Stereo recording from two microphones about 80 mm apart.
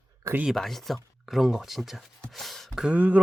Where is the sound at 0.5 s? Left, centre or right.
Centre.